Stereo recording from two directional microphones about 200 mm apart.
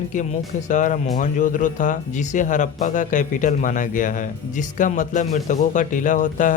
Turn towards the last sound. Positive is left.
turn(degrees=40)  # may be behind; listen again after turning